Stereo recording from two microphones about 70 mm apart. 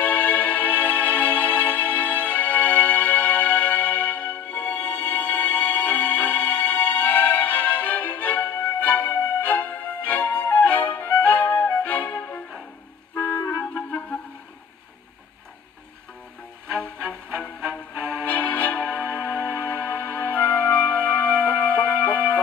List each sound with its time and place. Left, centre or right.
0.0 s music: left
13.4 s clarinet: left
13.8 s music: left
18.2 s music: left